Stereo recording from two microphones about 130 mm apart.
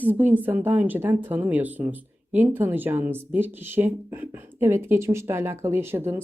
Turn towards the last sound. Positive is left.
turn(degrees=-20)  # may be behind; listen again after turning